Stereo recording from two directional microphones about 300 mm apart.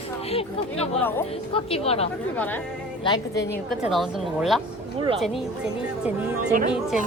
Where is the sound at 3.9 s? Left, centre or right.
Centre.